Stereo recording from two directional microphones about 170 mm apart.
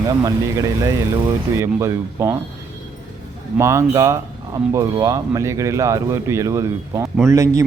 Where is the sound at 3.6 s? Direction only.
15° right (ahead or behind).